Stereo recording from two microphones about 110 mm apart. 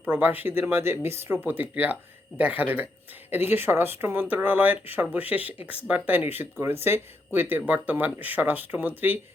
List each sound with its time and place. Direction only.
0.1 s a woman's voice: 15° right (ahead or behind)